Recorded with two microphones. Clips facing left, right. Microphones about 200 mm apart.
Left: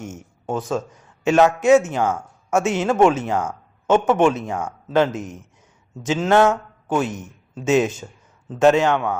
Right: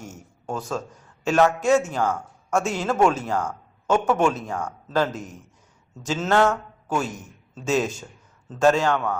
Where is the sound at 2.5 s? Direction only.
5° left (ahead or behind).